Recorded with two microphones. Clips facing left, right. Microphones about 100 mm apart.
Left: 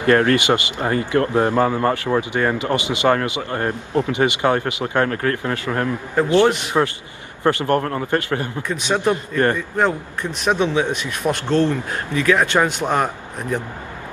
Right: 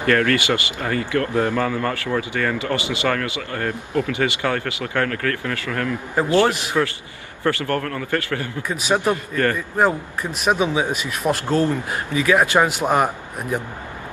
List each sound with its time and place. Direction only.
0.0 s a man's voice: 25° left (ahead or behind)
6.8 s a man's voice: 35° left (ahead or behind)
7.4 s a man's voice: 20° left (ahead or behind)
8.6 s speech: 5° right (ahead or behind)
9.1 s a man's voice: 25° left (ahead or behind)
9.8 s speech: 5° right (ahead or behind)